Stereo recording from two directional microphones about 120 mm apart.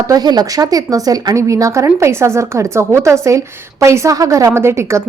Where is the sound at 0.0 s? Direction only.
30° right (ahead or behind).